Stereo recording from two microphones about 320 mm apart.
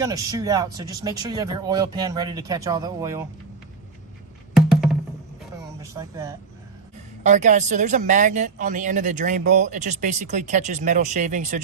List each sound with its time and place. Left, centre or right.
0.0 s speech: centre
4.5 s music: centre
5.8 s speech: centre
7.3 s speech: right